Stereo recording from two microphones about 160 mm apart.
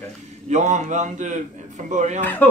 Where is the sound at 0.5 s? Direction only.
45° right (ahead or behind).